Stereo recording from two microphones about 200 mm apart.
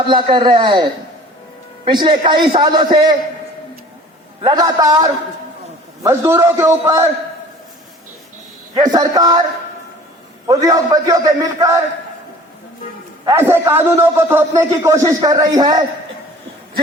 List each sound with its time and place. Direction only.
0.0 s a man's voice: 25° right (ahead or behind)
4.4 s a man's voice: 20° right (ahead or behind)
8.7 s a man's voice: 20° right (ahead or behind)
10.4 s a man's voice: 20° right (ahead or behind)
13.2 s a man's voice: 10° right (ahead or behind)